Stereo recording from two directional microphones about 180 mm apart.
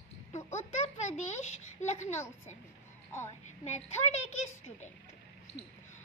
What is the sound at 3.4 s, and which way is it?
Speech, 40° left (ahead or behind).